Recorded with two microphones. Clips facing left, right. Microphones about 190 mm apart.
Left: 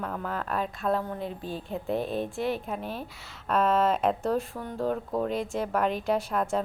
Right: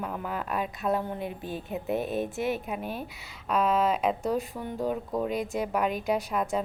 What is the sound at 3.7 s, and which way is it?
Speech, centre (ahead or behind).